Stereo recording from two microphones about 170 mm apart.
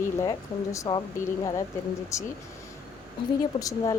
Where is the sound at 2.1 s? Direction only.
15° left (ahead or behind).